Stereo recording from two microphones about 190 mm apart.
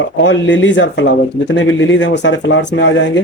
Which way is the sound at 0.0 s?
70° left (ahead or behind).